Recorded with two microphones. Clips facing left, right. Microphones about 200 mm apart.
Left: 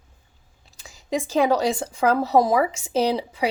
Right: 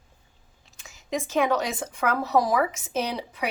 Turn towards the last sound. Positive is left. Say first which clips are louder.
# left 7 dB
turn(degrees=30)  # may be behind; listen again after turning